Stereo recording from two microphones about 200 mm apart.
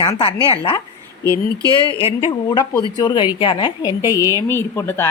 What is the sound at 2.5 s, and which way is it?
A woman's voice, 20° left (ahead or behind).